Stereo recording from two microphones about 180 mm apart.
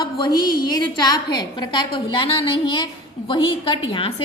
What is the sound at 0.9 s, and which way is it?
A woman's voice, 20° left (ahead or behind).